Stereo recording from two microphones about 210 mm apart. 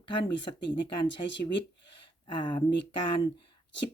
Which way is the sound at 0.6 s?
55° left (ahead or behind).